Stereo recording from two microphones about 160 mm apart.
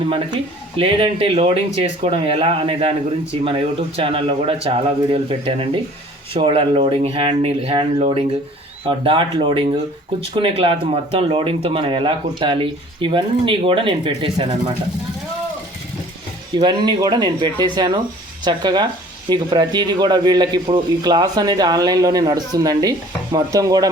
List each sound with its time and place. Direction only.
0.0 s speech: 35° right (ahead or behind)
16.6 s speech: 25° right (ahead or behind)